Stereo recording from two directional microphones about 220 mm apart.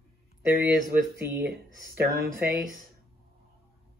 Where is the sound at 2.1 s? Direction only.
45° right (ahead or behind).